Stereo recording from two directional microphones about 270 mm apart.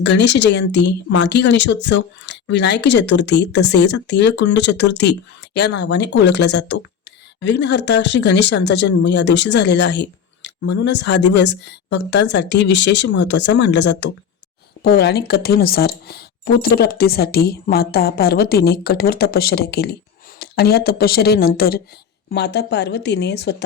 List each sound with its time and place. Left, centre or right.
0.0 s speech: left